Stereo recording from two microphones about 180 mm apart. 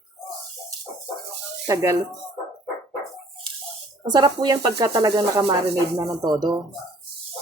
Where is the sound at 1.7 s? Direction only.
20° right (ahead or behind).